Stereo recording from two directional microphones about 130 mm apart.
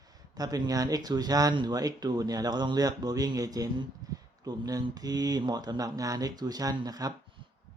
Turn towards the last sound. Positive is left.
turn(degrees=-30)  # may be behind; listen again after turning